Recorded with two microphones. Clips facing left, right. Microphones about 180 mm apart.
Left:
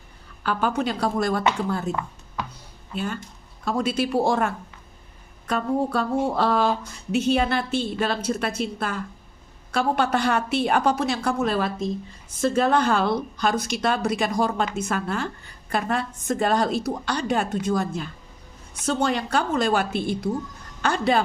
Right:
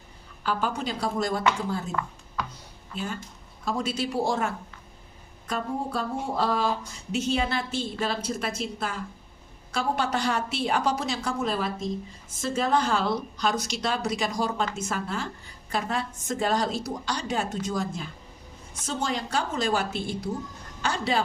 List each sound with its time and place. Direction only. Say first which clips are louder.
0.4 s speech: left 4 dB; 60° left (ahead or behind)
1.9 s a sound: left 3 dB; 20° left (ahead or behind)
2.9 s speech: left 4 dB; 60° left (ahead or behind)